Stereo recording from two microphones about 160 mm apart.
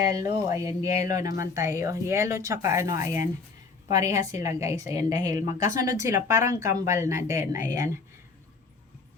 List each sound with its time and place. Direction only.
0.0 s speech: 20° right (ahead or behind)